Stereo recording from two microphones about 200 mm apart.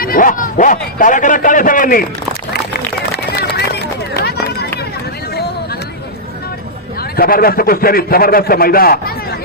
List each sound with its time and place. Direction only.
0.0 s a man's voice: 45° left (ahead or behind)
4.1 s run: 55° left (ahead or behind)
7.2 s a man's voice: 45° left (ahead or behind)